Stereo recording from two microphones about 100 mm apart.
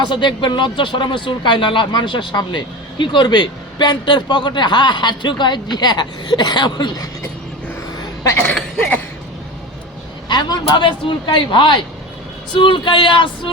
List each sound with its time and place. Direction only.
0.0 s speech: 50° left (ahead or behind)
7.9 s a sound: 35° left (ahead or behind)
10.2 s speech: 45° left (ahead or behind)